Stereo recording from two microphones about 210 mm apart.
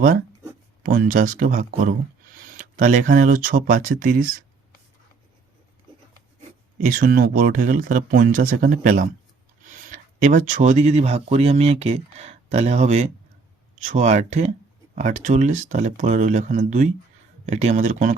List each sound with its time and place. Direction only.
0.8 s speech: 40° right (ahead or behind)
6.8 s speech: 40° right (ahead or behind)